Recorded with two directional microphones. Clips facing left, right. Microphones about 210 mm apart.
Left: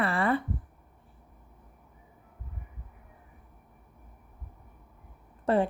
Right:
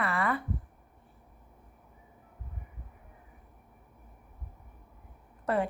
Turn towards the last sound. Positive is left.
turn(degrees=30)  # may be behind; listen again after turning